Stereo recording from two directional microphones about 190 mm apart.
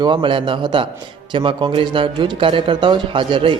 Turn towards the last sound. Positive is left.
turn(degrees=-25)  # may be behind; listen again after turning